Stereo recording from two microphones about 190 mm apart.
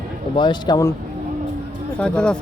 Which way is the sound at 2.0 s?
5° left (ahead or behind).